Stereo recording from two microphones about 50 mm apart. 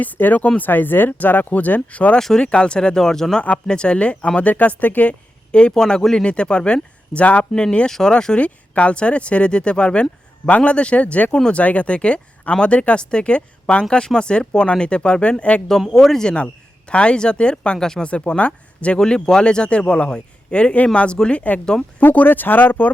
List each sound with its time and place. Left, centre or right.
0.0 s speech: left
2.1 s speech: centre
4.5 s speech: left
5.5 s speech: centre
6.2 s speech: centre
15.8 s speech: centre
18.0 s speech: left
18.9 s speech: centre
22.0 s speech: left